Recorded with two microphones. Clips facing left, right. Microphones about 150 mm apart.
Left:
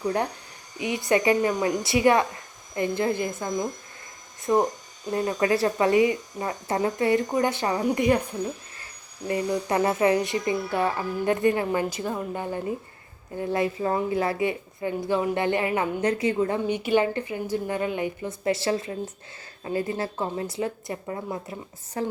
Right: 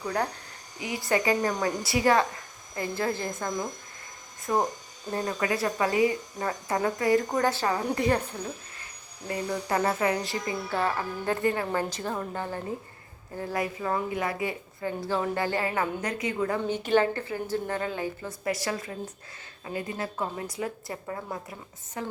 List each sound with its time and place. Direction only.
0.8 s speech: 20° left (ahead or behind)
5.2 s speech: 30° left (ahead or behind)
9.2 s speech: 25° left (ahead or behind)
16.6 s speech: 15° left (ahead or behind)
22.0 s speech: 35° left (ahead or behind)